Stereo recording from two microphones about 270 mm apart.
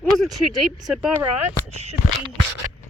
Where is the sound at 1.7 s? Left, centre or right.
Right.